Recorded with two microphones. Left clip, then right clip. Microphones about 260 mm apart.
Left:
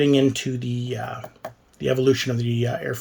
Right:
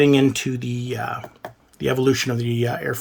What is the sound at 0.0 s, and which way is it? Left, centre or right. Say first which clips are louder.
Speech: right 2 dB; centre.